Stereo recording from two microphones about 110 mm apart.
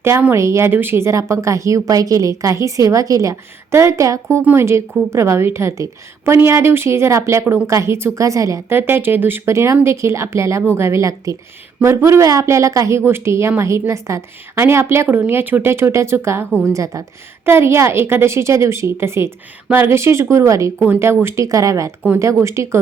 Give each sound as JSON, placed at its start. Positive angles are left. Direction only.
{"t": 0.0, "sound": "a woman's voice", "side_deg": -20}
{"t": 20.7, "sound": "a woman's voice", "side_deg": -15}